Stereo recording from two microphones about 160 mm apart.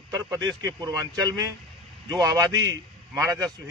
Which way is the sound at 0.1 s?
25° right (ahead or behind).